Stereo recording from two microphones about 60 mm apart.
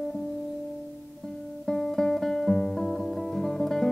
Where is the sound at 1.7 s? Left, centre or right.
Centre.